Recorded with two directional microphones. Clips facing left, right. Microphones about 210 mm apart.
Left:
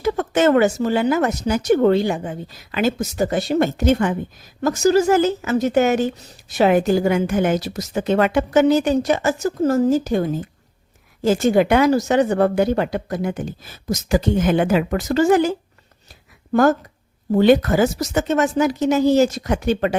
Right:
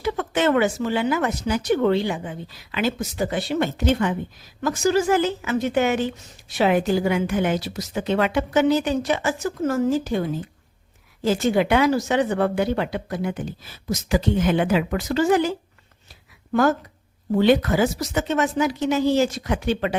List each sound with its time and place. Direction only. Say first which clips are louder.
0.0 s a woman's voice: left 5 dB; 45° left (ahead or behind)